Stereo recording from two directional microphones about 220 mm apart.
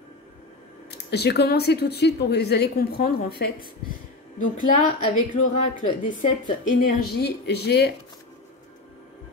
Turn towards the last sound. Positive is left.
turn(degrees=50)  # may be behind; listen again after turning